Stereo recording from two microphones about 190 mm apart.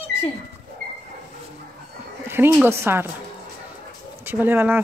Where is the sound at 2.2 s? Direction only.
10° right (ahead or behind).